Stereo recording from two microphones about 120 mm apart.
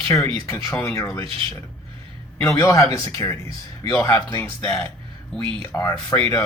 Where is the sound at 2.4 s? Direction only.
25° left (ahead or behind).